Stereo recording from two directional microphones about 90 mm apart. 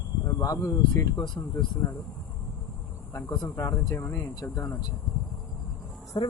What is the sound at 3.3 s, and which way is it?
Speech, 50° left (ahead or behind).